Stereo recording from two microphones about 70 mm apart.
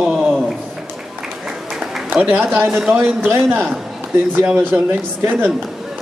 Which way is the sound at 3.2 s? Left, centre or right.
Right.